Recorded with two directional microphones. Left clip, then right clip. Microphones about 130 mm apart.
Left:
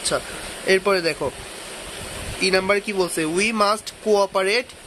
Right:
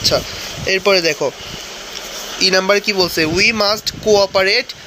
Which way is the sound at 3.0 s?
5° right (ahead or behind).